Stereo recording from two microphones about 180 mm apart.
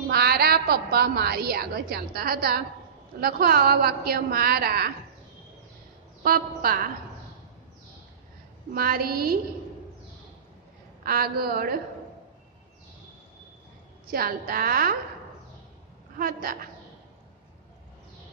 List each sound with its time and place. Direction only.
0.1 s a woman's voice: 60° right (ahead or behind)
6.2 s a woman's voice: 55° right (ahead or behind)
8.7 s a woman's voice: 55° right (ahead or behind)
11.1 s a woman's voice: 60° right (ahead or behind)
14.1 s a woman's voice: 55° right (ahead or behind)
16.2 s a woman's voice: 55° right (ahead or behind)